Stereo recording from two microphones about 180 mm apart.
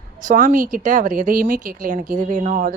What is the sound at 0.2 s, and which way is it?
Speech, 45° right (ahead or behind).